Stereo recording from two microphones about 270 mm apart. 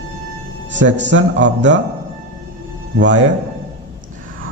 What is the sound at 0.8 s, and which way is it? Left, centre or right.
Speech, right.